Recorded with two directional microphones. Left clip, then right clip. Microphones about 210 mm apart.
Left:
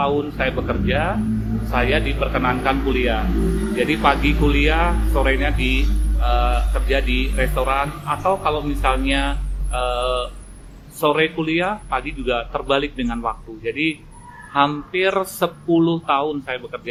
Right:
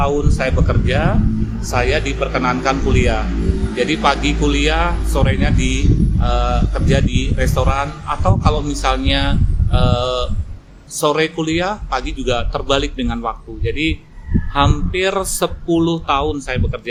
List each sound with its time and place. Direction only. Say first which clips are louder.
0.0 s a man's voice: right 2 dB; 20° right (ahead or behind)